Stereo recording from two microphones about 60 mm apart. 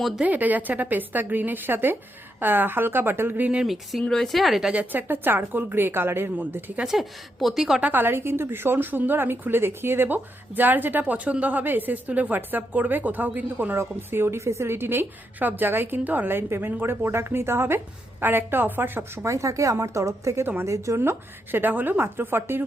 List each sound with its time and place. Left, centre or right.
0.3 s a woman's voice: right
4.0 s a woman's voice: centre
4.7 s a woman's voice: right
6.8 s a woman's voice: centre
7.8 s a woman's voice: right
13.7 s a woman's voice: right
19.2 s speech: right
21.5 s a woman's voice: right